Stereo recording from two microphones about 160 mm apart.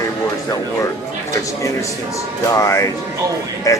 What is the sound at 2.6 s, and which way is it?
Speech, 20° left (ahead or behind).